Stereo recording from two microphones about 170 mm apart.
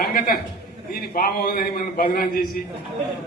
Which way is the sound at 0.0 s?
60° left (ahead or behind).